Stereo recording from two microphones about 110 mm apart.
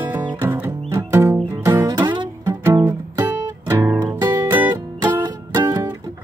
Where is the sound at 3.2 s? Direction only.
30° right (ahead or behind).